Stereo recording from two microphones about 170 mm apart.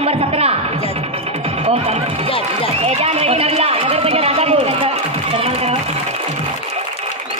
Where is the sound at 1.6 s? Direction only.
35° right (ahead or behind).